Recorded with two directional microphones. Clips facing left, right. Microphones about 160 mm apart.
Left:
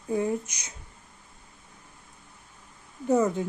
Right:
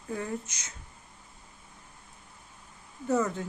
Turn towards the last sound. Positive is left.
turn(degrees=15)  # may be behind; listen again after turning